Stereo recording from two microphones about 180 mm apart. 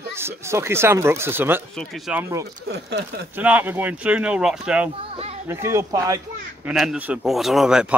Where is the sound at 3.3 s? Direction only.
10° right (ahead or behind).